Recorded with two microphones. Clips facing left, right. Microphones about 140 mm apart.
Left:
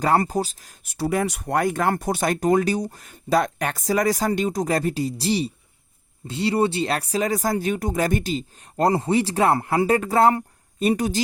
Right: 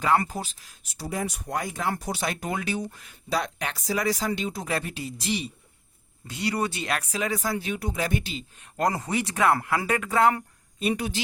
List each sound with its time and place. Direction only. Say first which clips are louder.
0.0 s speech: left 4 dB; 40° left (ahead or behind)
0.9 s speech: left 8 dB; 70° left (ahead or behind); by 11.2 s 40° left (ahead or behind)